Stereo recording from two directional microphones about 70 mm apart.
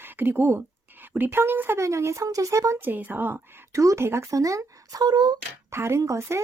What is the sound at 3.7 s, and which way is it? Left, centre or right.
Speech, right.